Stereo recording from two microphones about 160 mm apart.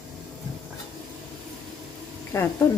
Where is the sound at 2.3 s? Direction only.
15° left (ahead or behind).